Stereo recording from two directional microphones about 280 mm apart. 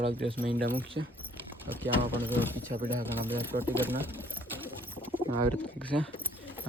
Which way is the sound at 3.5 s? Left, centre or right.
Right.